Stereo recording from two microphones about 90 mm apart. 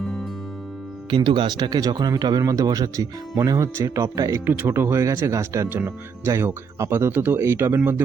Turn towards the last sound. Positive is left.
turn(degrees=-30)  # may be behind; listen again after turning